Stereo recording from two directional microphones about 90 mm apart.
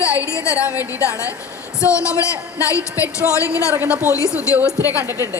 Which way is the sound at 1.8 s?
35° left (ahead or behind).